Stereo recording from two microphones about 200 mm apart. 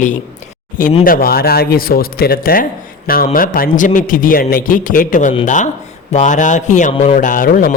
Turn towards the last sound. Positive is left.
turn(degrees=45)  # may be behind; listen again after turning